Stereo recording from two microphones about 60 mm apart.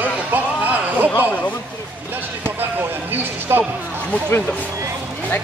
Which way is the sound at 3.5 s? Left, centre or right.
Right.